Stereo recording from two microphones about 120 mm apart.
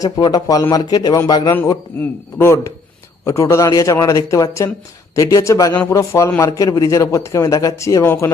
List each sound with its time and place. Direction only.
0.0 s speech: 30° left (ahead or behind)
2.0 s speech: 20° left (ahead or behind)